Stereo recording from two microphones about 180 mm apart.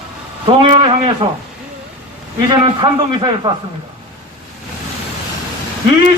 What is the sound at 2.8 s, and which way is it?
Speech, 25° right (ahead or behind).